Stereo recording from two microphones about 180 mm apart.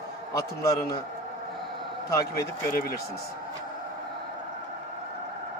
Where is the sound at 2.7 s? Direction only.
55° left (ahead or behind).